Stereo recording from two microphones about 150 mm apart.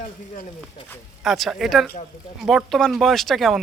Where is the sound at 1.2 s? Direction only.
Centre (ahead or behind).